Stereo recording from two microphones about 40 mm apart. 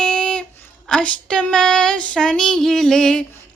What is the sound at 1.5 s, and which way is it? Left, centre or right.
Female singing, centre.